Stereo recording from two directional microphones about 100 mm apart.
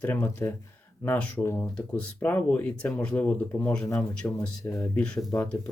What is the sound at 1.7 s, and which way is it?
Speech, 10° left (ahead or behind).